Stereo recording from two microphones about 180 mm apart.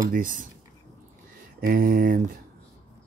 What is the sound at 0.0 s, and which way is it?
Speech, 50° right (ahead or behind).